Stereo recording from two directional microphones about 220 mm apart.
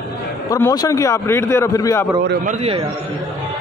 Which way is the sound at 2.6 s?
25° right (ahead or behind).